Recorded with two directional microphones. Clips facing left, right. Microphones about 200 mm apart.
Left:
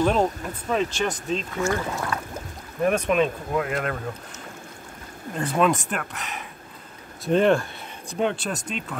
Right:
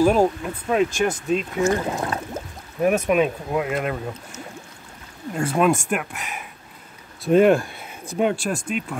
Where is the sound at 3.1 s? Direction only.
10° right (ahead or behind).